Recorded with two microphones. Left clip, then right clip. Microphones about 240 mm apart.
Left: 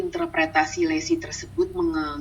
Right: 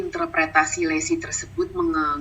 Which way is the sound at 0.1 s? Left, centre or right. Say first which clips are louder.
Right 4 dB; right.